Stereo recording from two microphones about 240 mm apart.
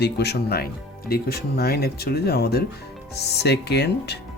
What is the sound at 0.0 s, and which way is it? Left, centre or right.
Speech, left.